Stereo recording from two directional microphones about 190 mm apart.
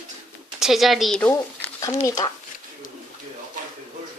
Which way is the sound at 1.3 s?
15° left (ahead or behind).